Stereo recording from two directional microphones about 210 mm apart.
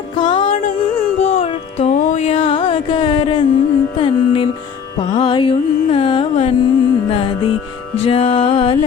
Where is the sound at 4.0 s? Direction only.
25° left (ahead or behind).